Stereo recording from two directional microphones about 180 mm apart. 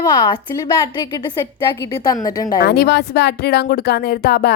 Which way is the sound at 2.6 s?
65° left (ahead or behind).